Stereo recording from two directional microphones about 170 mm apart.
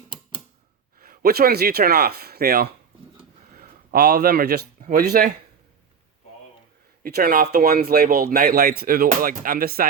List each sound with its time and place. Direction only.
0.9 s a man's voice: 60° right (ahead or behind)
7.0 s speech: 60° right (ahead or behind)
9.0 s speech: 50° right (ahead or behind)